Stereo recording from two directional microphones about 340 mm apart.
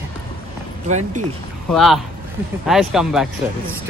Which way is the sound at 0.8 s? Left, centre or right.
Right.